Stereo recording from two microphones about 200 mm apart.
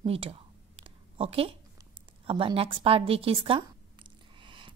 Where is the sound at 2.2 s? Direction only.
25° right (ahead or behind).